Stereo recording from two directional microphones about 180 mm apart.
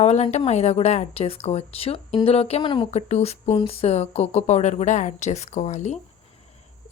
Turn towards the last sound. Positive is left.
turn(degrees=40)  # may be behind; listen again after turning